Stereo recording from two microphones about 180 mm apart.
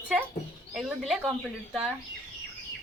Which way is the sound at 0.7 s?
5° right (ahead or behind).